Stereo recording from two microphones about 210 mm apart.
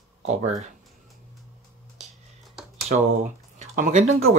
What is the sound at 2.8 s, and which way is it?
Speech, 35° right (ahead or behind).